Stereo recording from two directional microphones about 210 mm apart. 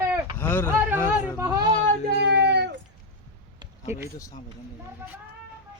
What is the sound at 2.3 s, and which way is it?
Cat, 55° right (ahead or behind).